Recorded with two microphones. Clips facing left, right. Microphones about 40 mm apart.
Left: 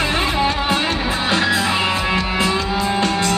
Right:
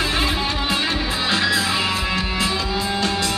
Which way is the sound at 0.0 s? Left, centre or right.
Left.